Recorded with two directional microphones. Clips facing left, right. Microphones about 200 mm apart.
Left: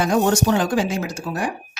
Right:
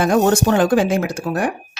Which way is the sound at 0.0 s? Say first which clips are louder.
Right 3 dB; 55° right (ahead or behind).